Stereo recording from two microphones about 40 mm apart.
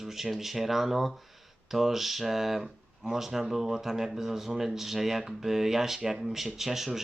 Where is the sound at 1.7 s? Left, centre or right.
Centre.